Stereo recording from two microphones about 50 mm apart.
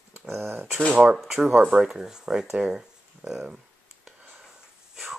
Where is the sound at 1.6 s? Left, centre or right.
Centre.